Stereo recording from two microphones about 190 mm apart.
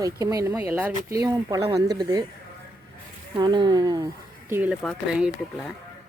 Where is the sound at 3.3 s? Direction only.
25° right (ahead or behind).